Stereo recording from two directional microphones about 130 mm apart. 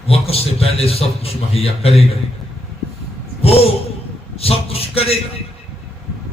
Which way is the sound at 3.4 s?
50° left (ahead or behind).